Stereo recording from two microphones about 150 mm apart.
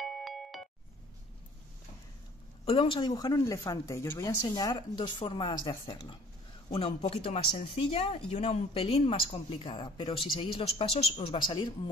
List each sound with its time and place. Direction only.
0.2 s music: centre (ahead or behind)
2.6 s speech: 40° left (ahead or behind)